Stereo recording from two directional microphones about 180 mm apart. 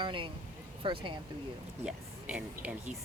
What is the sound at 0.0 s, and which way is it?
Speech, 25° right (ahead or behind).